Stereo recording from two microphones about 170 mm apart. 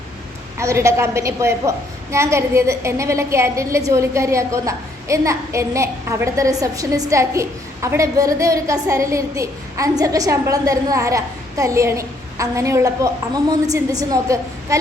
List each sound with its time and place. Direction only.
0.6 s a woman's voice: 15° right (ahead or behind)
14.1 s a woman's voice: 20° right (ahead or behind)